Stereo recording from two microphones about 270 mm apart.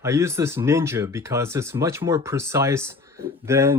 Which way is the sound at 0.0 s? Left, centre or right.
Centre.